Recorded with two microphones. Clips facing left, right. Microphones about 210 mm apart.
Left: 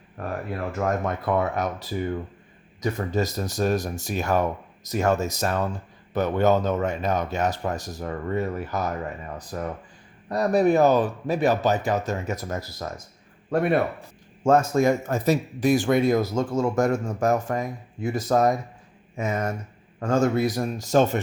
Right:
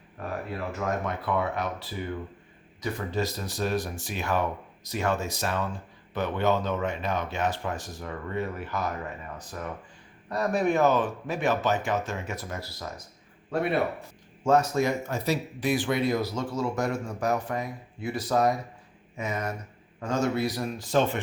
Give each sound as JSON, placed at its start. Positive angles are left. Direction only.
{"t": 0.5, "sound": "speech", "side_deg": 45}